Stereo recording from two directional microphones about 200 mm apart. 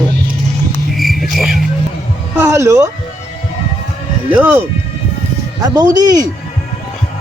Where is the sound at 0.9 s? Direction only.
Centre (ahead or behind).